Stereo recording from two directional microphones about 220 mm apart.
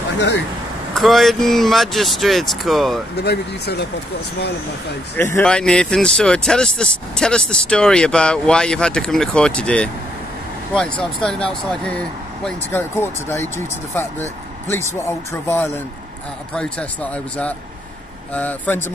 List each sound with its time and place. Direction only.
0.9 s speech: centre (ahead or behind)
3.2 s speech: 50° left (ahead or behind)
5.1 s speech: 10° left (ahead or behind)
12.4 s speech: 10° left (ahead or behind)